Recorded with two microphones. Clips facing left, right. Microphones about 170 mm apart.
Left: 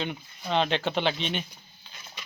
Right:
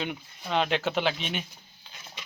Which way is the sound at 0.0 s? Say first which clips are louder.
Left 1 dB; 5° right (ahead or behind).